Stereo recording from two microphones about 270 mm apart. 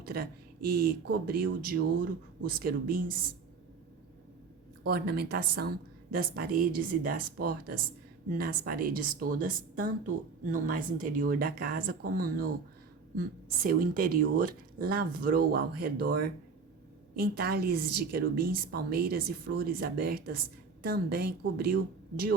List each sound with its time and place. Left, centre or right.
0.0 s a woman's voice: right
4.8 s a woman's voice: right